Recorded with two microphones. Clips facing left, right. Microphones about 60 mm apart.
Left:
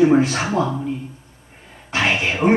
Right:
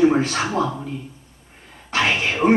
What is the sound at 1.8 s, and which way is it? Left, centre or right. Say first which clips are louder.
Speech: left 1 dB; centre.